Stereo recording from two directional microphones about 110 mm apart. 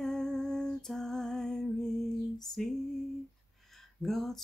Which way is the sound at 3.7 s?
Centre (ahead or behind).